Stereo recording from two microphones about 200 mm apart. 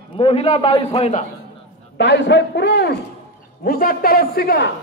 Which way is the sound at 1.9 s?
60° left (ahead or behind).